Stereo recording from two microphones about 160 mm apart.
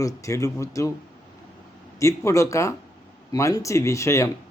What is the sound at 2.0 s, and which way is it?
Speech, 20° left (ahead or behind).